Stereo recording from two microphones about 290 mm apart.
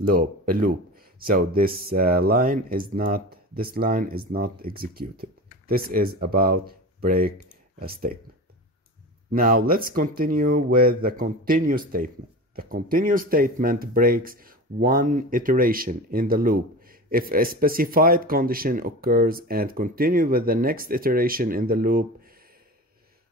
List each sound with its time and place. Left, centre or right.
0.0 s speech: right
9.3 s speech: right